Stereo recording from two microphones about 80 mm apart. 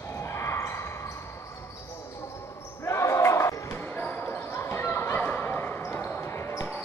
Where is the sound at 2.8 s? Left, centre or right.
Left.